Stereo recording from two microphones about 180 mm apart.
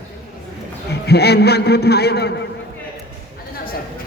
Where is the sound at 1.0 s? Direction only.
65° left (ahead or behind).